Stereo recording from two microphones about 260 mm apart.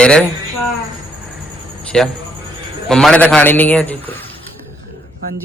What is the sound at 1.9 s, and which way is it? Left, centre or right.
A man's voice, centre.